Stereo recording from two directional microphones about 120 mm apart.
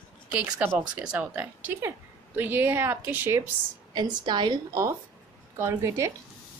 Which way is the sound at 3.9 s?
35° right (ahead or behind).